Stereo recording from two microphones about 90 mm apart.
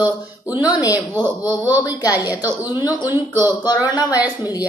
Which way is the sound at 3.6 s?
45° left (ahead or behind).